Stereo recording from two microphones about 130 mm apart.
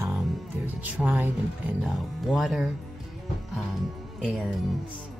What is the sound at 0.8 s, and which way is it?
Speech, 10° right (ahead or behind).